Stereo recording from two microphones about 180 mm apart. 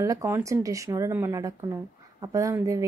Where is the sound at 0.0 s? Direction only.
15° right (ahead or behind).